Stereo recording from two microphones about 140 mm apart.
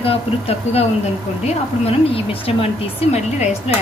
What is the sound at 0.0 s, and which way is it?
Speech, 45° left (ahead or behind).